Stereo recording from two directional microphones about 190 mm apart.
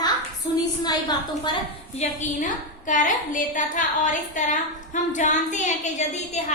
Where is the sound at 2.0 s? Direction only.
40° left (ahead or behind).